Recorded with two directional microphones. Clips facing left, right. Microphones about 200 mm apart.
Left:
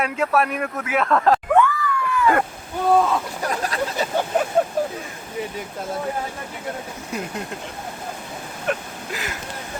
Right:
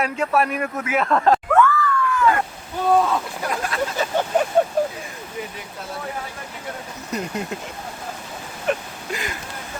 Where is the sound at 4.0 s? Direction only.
10° left (ahead or behind).